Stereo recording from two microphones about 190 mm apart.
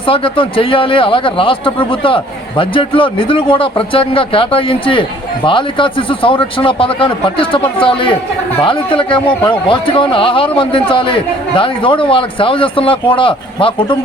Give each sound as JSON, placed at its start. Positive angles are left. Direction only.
{"t": 0.0, "sound": "a man's voice", "side_deg": 30}